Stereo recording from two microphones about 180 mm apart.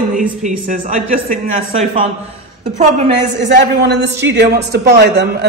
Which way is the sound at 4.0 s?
70° right (ahead or behind).